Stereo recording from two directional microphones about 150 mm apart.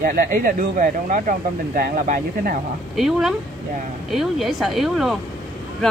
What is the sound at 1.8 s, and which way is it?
Speech, 75° right (ahead or behind).